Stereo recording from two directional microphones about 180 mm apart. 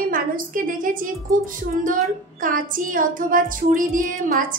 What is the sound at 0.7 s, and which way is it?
A woman's voice, 50° right (ahead or behind).